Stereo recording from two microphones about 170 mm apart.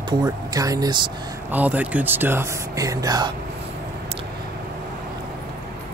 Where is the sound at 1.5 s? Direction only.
10° right (ahead or behind).